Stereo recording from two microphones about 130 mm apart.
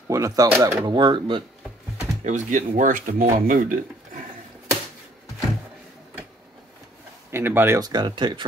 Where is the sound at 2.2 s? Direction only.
70° right (ahead or behind); by 3.4 s 90° right.